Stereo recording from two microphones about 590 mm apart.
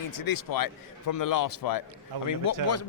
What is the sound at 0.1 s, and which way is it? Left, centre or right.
A man's voice, left.